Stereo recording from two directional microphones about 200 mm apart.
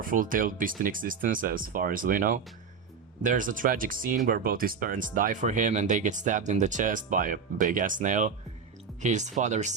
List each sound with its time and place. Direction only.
0.0 s speech: 45° right (ahead or behind)